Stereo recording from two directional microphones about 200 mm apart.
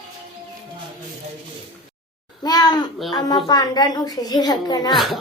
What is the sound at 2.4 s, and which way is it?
Babbling, 20° left (ahead or behind).